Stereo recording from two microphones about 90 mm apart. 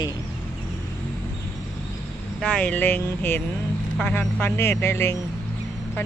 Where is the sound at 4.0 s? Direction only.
15° left (ahead or behind).